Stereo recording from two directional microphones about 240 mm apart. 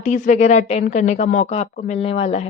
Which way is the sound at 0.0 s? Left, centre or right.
Left.